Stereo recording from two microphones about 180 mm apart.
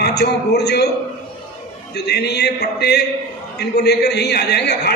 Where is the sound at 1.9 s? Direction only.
65° left (ahead or behind).